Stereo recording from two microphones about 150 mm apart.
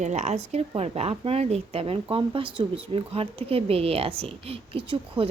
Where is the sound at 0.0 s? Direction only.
50° right (ahead or behind).